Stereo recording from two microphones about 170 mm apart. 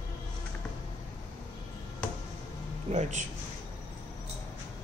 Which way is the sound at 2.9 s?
45° right (ahead or behind).